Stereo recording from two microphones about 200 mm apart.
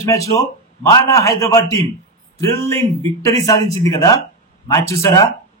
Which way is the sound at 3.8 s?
15° left (ahead or behind).